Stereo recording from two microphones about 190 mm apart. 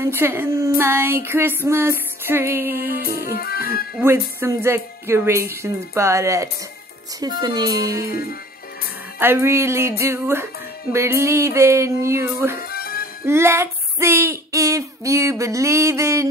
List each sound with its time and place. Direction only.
0.0 s speech: 10° right (ahead or behind)
3.3 s music: 55° left (ahead or behind)
4.0 s speech: 10° right (ahead or behind)
8.1 s music: 55° left (ahead or behind)
9.2 s speech: 15° right (ahead or behind)
12.6 s music: 50° left (ahead or behind)
13.2 s speech: 15° right (ahead or behind)